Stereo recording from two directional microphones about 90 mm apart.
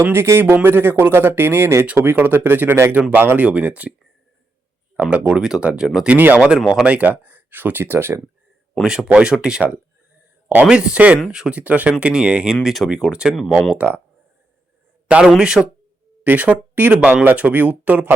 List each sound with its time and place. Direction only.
0.0 s speech: 25° right (ahead or behind)
4.9 s speech: 15° right (ahead or behind)
6.1 s speech: 20° right (ahead or behind)
8.8 s speech: 5° right (ahead or behind)
13.7 s speech: 20° right (ahead or behind)
15.0 s speech: 10° right (ahead or behind)